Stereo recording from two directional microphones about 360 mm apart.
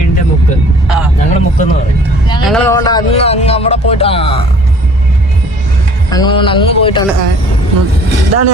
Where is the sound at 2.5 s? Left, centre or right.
Centre.